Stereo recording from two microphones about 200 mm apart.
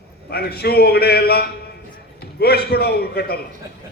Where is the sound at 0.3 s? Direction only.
55° left (ahead or behind).